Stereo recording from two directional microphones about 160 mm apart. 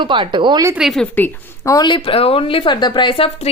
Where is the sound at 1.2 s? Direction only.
20° left (ahead or behind); by 3.5 s 35° left (ahead or behind).